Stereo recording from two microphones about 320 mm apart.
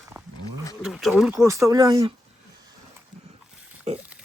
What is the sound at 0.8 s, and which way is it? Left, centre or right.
Speech, centre.